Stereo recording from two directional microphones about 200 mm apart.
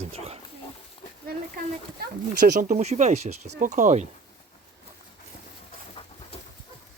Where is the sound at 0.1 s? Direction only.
30° right (ahead or behind).